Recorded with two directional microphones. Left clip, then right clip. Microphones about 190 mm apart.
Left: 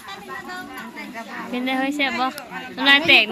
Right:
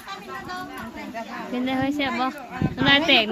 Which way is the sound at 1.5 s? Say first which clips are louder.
Left 2 dB; 10° right (ahead or behind).